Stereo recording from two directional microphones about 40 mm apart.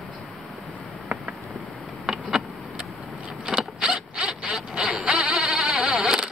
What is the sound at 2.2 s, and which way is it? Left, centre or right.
Vehicle, right.